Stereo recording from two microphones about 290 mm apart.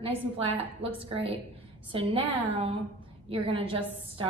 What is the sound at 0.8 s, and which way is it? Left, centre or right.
A woman's voice, centre.